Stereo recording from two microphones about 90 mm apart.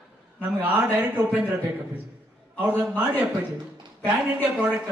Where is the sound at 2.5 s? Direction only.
15° right (ahead or behind).